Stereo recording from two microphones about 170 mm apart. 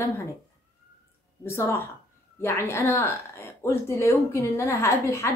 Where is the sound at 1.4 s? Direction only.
15° left (ahead or behind).